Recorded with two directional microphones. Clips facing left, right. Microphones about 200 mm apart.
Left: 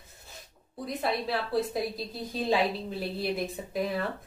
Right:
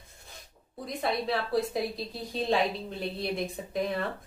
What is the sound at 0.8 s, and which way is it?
A woman's voice, centre (ahead or behind).